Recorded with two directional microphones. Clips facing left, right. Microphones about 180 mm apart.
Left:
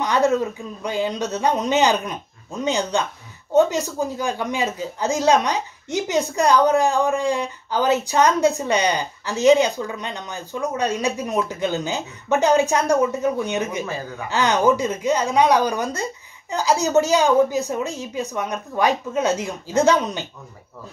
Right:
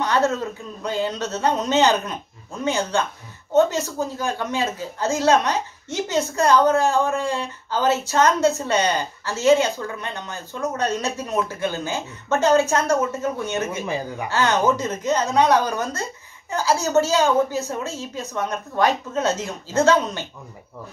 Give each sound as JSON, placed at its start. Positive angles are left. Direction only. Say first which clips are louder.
{"t": 0.0, "sound": "speech", "louder": "left 2 dB", "side_deg": 15}
{"t": 13.8, "sound": "speech", "louder": "right 3 dB", "side_deg": -15}
{"t": 14.3, "sound": "speech", "louder": "left 2 dB", "side_deg": 15}